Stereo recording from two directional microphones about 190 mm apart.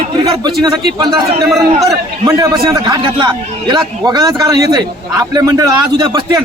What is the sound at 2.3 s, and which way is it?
A man's voice, 20° right (ahead or behind).